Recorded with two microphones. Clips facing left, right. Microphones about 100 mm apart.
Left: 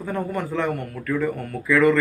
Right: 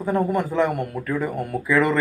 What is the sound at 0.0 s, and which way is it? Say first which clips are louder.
Speech: right 5 dB; 15° right (ahead or behind).